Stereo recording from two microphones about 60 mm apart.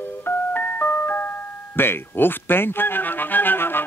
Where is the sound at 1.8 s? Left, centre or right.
Left.